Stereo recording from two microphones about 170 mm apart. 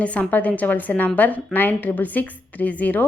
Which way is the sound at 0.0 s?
10° left (ahead or behind).